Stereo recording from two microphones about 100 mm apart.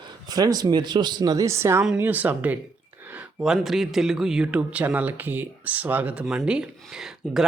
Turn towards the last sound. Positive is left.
turn(degrees=-5)  # may be behind; listen again after turning